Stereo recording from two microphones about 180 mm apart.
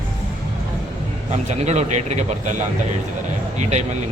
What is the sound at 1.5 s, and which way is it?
A man's voice, 40° right (ahead or behind).